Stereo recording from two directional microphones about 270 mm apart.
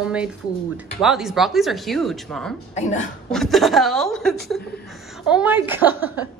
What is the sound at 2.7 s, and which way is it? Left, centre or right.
Speech, left.